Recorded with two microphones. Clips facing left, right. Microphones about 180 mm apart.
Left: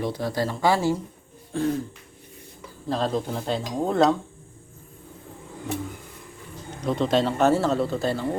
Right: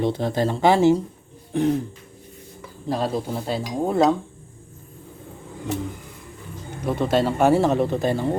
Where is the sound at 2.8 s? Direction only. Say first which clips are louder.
Right 1 dB; 10° right (ahead or behind).